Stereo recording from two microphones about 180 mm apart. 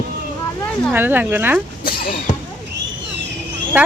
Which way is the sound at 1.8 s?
55° left (ahead or behind).